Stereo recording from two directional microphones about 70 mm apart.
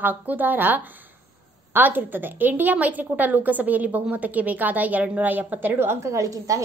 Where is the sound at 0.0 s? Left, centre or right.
Right.